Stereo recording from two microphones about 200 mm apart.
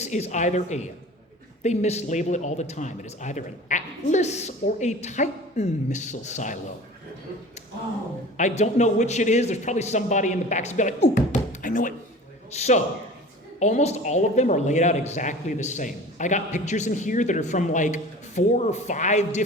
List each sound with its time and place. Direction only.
0.0 s speech: 35° left (ahead or behind)
8.4 s speech: 35° left (ahead or behind)